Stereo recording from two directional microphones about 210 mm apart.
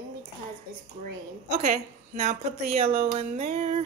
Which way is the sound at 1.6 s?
30° right (ahead or behind).